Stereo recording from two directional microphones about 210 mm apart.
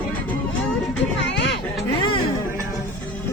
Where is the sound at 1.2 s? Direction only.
55° left (ahead or behind).